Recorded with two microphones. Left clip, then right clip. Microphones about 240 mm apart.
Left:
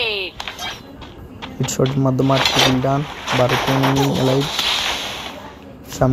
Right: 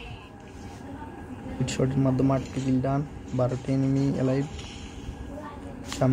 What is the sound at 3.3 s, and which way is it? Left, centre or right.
Speech, left.